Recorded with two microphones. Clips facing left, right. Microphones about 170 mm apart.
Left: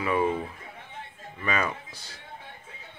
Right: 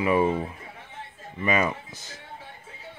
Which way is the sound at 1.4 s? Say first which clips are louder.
Right 4 dB; 10° right (ahead or behind).